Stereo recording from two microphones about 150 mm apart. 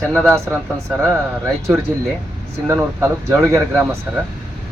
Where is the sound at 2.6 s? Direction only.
20° right (ahead or behind).